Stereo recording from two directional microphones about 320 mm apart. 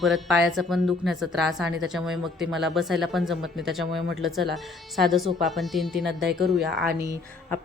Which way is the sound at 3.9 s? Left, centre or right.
Right.